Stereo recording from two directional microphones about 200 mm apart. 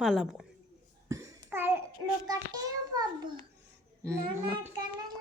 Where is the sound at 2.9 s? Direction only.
20° right (ahead or behind).